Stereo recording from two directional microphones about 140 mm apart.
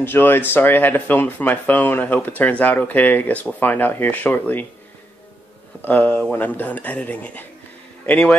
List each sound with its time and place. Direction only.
0.0 s speech: 15° left (ahead or behind)
5.8 s speech: 10° left (ahead or behind)